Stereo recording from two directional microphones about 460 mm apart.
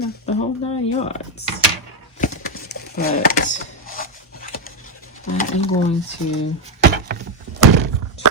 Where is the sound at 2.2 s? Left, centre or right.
Centre.